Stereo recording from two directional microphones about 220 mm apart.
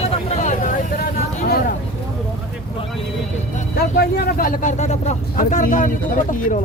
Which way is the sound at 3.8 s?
45° left (ahead or behind).